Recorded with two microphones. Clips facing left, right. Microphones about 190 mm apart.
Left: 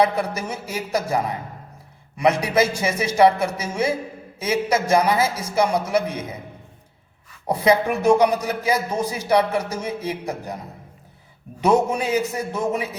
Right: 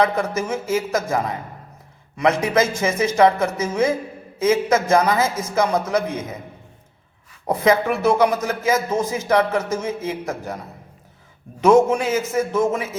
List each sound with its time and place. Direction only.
0.0 s a man's voice: 10° left (ahead or behind)
7.4 s a man's voice: 15° left (ahead or behind)
11.6 s a man's voice: 15° left (ahead or behind)